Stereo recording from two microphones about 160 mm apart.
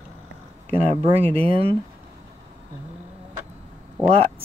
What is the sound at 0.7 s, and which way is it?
Speech, 35° right (ahead or behind).